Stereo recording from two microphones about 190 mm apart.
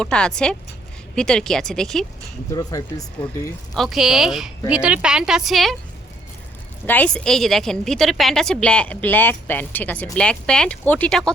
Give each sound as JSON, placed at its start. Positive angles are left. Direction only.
{"t": 0.0, "sound": "a woman's voice", "side_deg": 5}
{"t": 2.5, "sound": "speech", "side_deg": 15}
{"t": 3.8, "sound": "a woman's voice", "side_deg": 0}
{"t": 6.8, "sound": "a woman's voice", "side_deg": 10}